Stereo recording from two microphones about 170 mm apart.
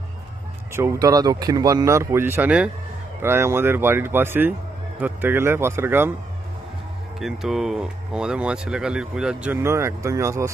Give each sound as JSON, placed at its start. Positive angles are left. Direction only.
{"t": 0.7, "sound": "speech", "side_deg": -20}
{"t": 7.2, "sound": "speech", "side_deg": 0}